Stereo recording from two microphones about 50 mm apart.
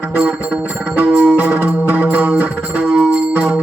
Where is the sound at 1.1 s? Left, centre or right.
Right.